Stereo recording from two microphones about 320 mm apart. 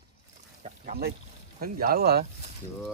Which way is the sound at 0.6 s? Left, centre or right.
Right.